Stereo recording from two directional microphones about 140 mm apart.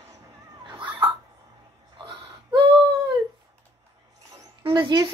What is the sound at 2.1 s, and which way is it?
Whimper, 35° right (ahead or behind).